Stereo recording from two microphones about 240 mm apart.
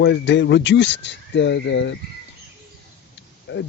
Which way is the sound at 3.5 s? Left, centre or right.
Left.